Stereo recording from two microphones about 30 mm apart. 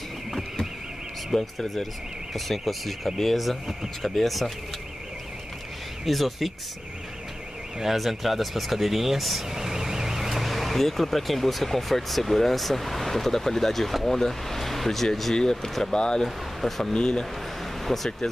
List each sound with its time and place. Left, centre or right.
1.3 s speech: centre
6.0 s speech: centre
7.8 s speech: centre
15.8 s speech: left
16.6 s speech: centre
16.9 s speech: left
17.8 s speech: centre